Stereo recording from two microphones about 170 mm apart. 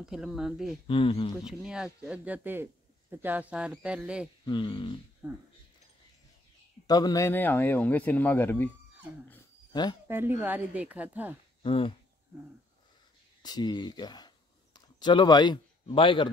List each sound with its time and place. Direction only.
0.0 s speech: centre (ahead or behind)
0.8 s speech: 30° left (ahead or behind)
1.4 s speech: 5° right (ahead or behind)
4.5 s speech: 30° left (ahead or behind)
6.9 s speech: 20° left (ahead or behind)
9.7 s a sound: 25° left (ahead or behind)
10.0 s a woman's voice: 15° right (ahead or behind)
11.6 s speech: 30° left (ahead or behind)
13.4 s speech: 25° left (ahead or behind)